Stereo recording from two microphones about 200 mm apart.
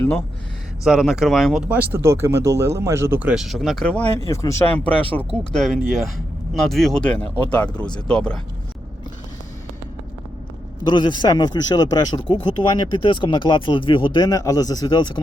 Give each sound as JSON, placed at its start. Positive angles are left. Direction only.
{"t": 0.9, "sound": "speech", "side_deg": -5}
{"t": 4.3, "sound": "speech", "side_deg": 15}
{"t": 10.8, "sound": "speech", "side_deg": 20}